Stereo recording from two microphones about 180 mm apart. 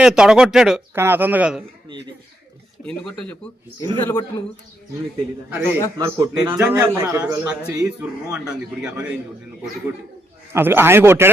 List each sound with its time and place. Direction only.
0.0 s speech: 5° right (ahead or behind)
2.8 s a man's voice: 5° left (ahead or behind)
5.5 s a man's voice: 10° right (ahead or behind)
10.5 s a man's voice: 10° right (ahead or behind)